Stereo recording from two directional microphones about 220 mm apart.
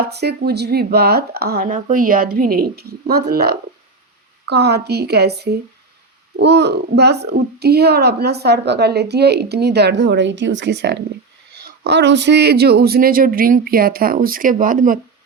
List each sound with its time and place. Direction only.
0.1 s a child's voice: 50° right (ahead or behind)